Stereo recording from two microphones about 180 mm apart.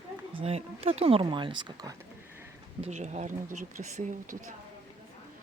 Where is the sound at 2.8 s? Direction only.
40° right (ahead or behind).